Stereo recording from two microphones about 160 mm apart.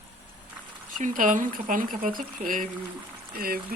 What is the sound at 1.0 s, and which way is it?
Speech, 55° right (ahead or behind).